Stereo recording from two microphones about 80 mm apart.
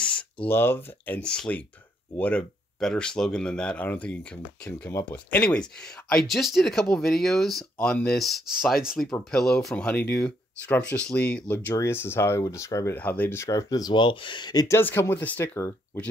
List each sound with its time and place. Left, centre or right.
0.0 s a sound: centre
0.5 s speech: left
1.2 s speech: centre
8.6 s speech: centre
9.8 s speech: centre; by 12.9 s left
12.9 s speech: left
13.4 s speech: left
13.9 s speech: left
14.7 s speech: left